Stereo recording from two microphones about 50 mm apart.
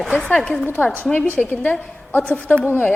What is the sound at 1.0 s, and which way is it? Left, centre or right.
A woman's voice, left.